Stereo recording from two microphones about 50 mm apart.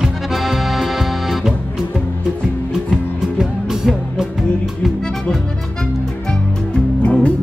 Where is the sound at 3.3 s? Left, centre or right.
Centre.